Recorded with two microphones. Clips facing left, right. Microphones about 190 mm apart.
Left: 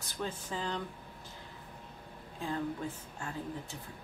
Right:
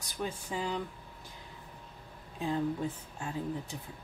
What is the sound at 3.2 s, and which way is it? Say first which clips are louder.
Speech: right 3 dB; 15° right (ahead or behind).